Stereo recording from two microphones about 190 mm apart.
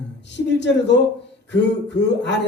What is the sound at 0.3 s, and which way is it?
Speech, 65° left (ahead or behind).